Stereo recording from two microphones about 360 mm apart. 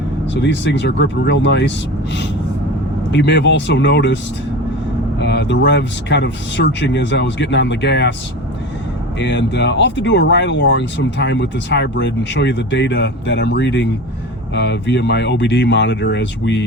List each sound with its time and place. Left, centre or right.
0.3 s speech: left
3.1 s speech: left
5.2 s speech: left
9.1 s speech: left